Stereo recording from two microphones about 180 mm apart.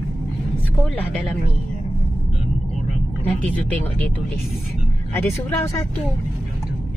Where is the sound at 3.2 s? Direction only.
10° left (ahead or behind).